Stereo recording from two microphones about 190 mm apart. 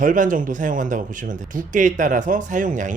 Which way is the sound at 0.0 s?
45° right (ahead or behind).